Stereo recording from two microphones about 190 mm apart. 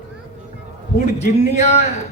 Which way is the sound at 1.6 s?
35° left (ahead or behind).